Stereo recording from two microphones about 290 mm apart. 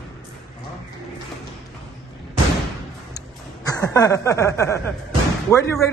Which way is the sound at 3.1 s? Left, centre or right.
Centre.